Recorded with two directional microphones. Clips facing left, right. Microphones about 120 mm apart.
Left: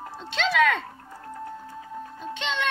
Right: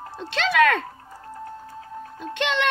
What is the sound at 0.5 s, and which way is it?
Speech, 55° right (ahead or behind).